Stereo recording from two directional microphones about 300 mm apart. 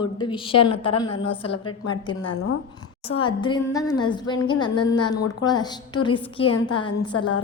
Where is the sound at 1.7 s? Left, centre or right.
Left.